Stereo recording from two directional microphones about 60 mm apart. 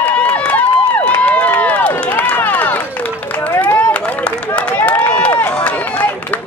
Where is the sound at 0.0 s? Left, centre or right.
Left.